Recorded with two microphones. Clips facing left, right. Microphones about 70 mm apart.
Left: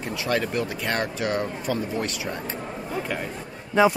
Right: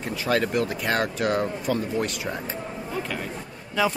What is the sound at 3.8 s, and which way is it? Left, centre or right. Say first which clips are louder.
Speech: left 5 dB; left.